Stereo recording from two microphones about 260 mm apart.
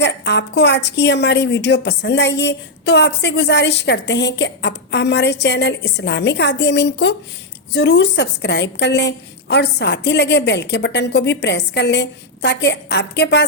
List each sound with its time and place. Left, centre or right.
0.0 s a woman's voice: left